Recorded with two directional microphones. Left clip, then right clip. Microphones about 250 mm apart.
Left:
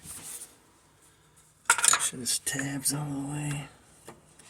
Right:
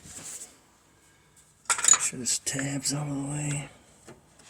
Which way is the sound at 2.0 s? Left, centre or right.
Right.